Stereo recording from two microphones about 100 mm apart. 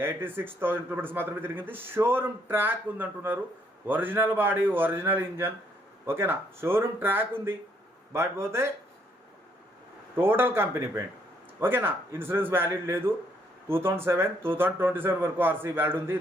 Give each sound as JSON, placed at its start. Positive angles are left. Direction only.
{"t": 0.0, "sound": "a man's voice", "side_deg": -20}
{"t": 10.2, "sound": "a man's voice", "side_deg": -20}